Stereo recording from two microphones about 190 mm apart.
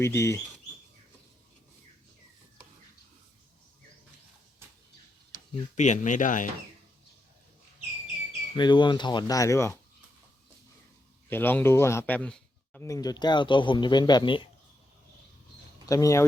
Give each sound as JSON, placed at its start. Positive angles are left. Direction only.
{"t": 0.0, "sound": "speech", "side_deg": 15}
{"t": 5.7, "sound": "speech", "side_deg": 40}
{"t": 8.5, "sound": "a man's voice", "side_deg": 25}
{"t": 11.3, "sound": "a man's voice", "side_deg": 10}
{"t": 15.9, "sound": "speech", "side_deg": 15}